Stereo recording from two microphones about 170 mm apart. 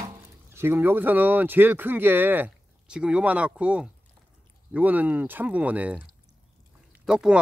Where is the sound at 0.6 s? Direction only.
10° right (ahead or behind).